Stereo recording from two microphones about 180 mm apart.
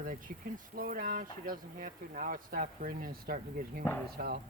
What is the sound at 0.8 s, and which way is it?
Speech, 50° right (ahead or behind).